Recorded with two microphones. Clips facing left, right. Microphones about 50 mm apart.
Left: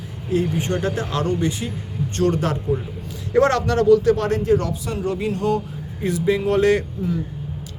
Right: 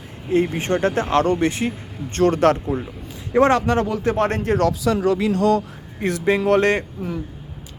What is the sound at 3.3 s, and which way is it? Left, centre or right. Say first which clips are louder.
A man's voice: right 1 dB; centre.